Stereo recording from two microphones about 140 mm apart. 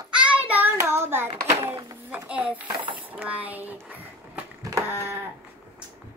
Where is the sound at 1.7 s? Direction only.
15° right (ahead or behind).